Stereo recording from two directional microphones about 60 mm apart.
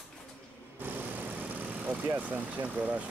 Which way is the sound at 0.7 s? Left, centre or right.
Right.